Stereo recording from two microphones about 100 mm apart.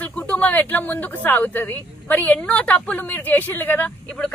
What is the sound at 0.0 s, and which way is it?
Speech, 15° left (ahead or behind).